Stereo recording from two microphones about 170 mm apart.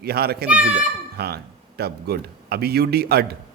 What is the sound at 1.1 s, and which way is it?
Speech, 70° right (ahead or behind).